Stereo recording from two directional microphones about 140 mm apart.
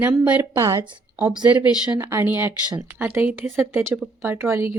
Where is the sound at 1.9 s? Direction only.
20° right (ahead or behind).